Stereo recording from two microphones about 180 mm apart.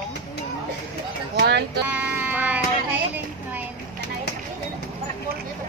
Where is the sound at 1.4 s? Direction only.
70° right (ahead or behind).